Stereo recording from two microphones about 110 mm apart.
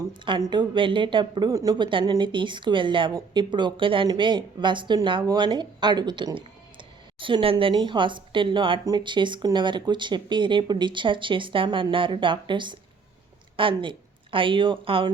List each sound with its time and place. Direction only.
0.1 s speech: 45° right (ahead or behind)
1.8 s speech: 50° right (ahead or behind)
8.8 s speech: 35° right (ahead or behind)